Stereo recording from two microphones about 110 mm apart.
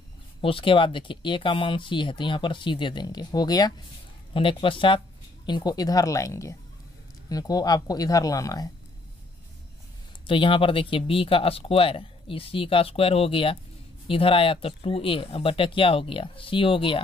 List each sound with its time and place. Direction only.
0.4 s speech: 55° left (ahead or behind); by 3.7 s 35° left (ahead or behind)
4.3 s speech: 55° left (ahead or behind)
5.5 s speech: 40° left (ahead or behind)
10.2 s speech: 50° left (ahead or behind)